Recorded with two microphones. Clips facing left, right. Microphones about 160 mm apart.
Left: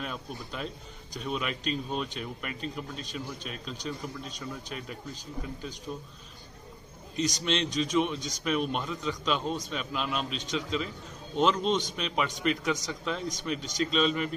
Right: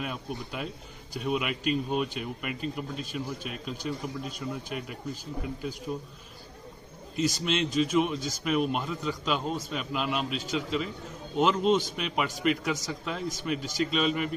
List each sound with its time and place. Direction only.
0.0 s speech: 5° right (ahead or behind)
7.2 s a man's voice: 5° right (ahead or behind)